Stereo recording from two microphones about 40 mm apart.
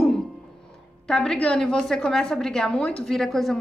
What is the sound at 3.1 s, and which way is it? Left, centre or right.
Speech, centre.